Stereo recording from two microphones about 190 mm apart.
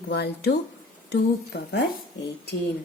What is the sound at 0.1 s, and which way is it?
A woman's voice, 65° left (ahead or behind).